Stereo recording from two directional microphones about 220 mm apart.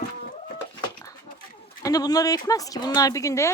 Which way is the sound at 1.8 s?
15° left (ahead or behind).